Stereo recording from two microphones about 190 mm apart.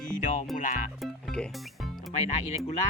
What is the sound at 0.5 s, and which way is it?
Speech, 45° left (ahead or behind).